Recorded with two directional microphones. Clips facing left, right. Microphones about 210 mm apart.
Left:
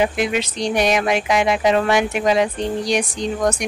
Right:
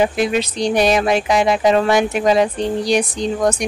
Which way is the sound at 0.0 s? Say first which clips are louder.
Right 3 dB; 35° right (ahead or behind).